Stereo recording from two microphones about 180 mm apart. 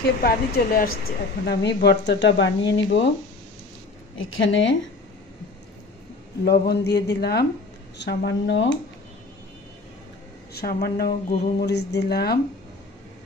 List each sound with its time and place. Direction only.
0.2 s a woman's voice: 55° left (ahead or behind); by 3.1 s 90° left
4.5 s a woman's voice: 90° left
6.4 s speech: 60° left (ahead or behind); by 8.7 s 90° left
10.5 s speech: 60° left (ahead or behind)